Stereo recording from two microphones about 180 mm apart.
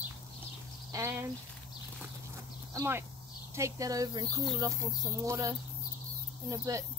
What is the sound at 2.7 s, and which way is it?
Speech, 15° right (ahead or behind).